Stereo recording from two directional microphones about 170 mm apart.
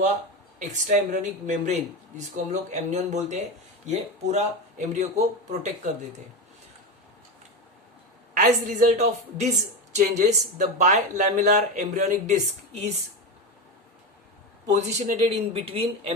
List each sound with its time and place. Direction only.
0.6 s speech: 45° right (ahead or behind)
8.4 s speech: 50° right (ahead or behind)
14.7 s speech: 40° right (ahead or behind)